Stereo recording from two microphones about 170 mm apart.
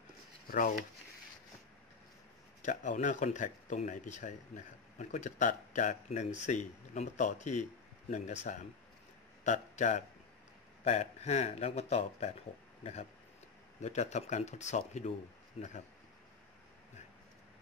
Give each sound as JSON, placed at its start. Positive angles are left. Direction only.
{"t": 2.6, "sound": "a man's voice", "side_deg": 45}
{"t": 13.7, "sound": "speech", "side_deg": 45}